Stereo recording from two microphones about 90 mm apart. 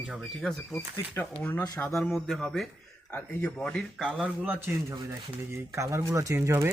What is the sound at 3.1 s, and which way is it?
Speech, 20° left (ahead or behind).